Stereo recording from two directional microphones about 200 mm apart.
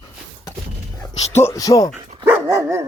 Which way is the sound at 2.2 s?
10° right (ahead or behind).